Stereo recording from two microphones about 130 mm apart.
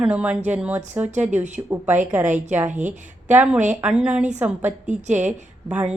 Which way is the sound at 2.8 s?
70° right (ahead or behind).